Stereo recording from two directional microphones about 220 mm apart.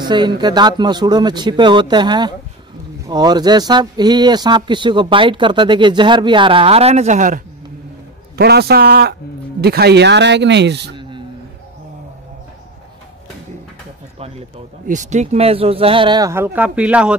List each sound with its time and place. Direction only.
0.0 s speech: 20° right (ahead or behind); by 7.4 s 35° right (ahead or behind)
8.4 s speech: 45° right (ahead or behind)
11.0 s a sound: 20° right (ahead or behind)
14.9 s speech: 35° right (ahead or behind); by 17.1 s 5° right (ahead or behind)